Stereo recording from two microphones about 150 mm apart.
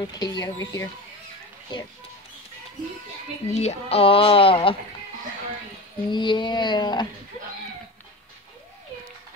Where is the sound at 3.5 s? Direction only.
45° left (ahead or behind).